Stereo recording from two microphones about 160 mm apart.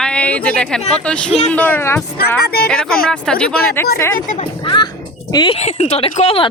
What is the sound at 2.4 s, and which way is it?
Speech, 70° left (ahead or behind).